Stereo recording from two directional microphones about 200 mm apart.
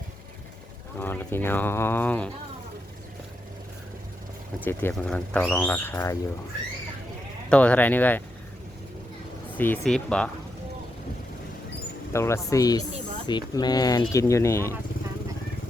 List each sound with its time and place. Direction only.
0.9 s speech: 10° left (ahead or behind)
4.6 s speech: 10° left (ahead or behind)
7.5 s speech: 5° left (ahead or behind)
9.6 s speech: 5° left (ahead or behind)
12.1 s speech: 15° left (ahead or behind)